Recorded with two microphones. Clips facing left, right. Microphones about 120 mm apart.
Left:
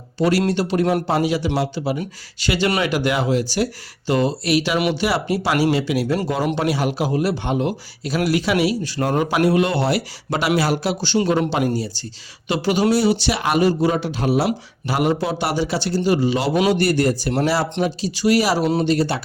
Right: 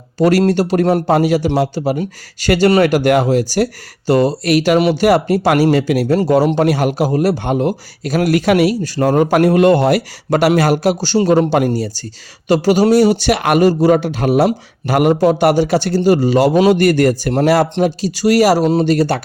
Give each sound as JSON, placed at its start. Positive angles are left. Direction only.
{"t": 0.2, "sound": "a man's voice", "side_deg": -45}